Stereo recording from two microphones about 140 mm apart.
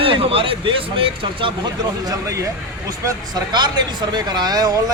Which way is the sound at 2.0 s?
25° right (ahead or behind).